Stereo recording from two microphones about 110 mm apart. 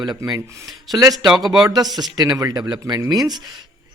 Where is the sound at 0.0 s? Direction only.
35° right (ahead or behind).